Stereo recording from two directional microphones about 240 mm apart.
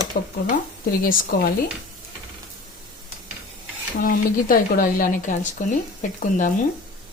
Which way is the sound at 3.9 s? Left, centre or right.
Left.